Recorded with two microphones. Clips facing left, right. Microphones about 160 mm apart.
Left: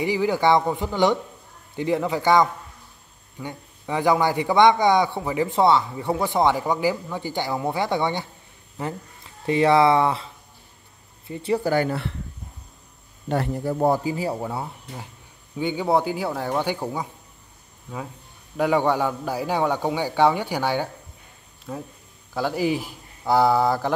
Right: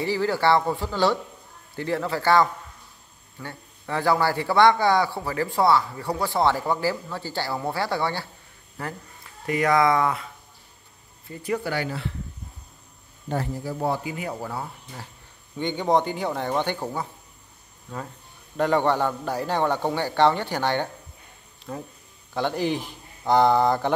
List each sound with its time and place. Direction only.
0.0 s a man's voice: 15° left (ahead or behind)
11.7 s speech: 50° left (ahead or behind)
13.3 s speech: 65° left (ahead or behind)
13.7 s speech: 45° left (ahead or behind); by 15.0 s 25° left (ahead or behind)
15.5 s a man's voice: 5° left (ahead or behind)
18.6 s a man's voice: 10° left (ahead or behind)